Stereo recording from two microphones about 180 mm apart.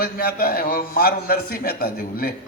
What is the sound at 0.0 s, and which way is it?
A man's voice, 55° left (ahead or behind).